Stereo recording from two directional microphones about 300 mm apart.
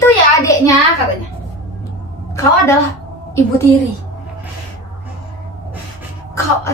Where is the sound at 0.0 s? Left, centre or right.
Centre.